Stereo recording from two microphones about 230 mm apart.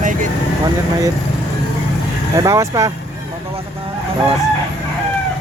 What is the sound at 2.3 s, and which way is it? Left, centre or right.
Speech, centre.